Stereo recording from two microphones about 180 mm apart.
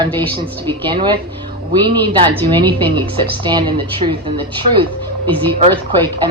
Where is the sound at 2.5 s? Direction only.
25° right (ahead or behind).